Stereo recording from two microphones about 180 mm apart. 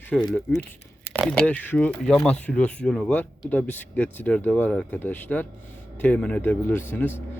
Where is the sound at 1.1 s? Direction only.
10° left (ahead or behind).